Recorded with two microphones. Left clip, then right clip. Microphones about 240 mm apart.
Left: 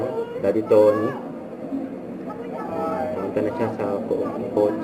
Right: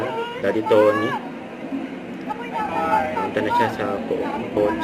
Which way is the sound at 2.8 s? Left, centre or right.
Right.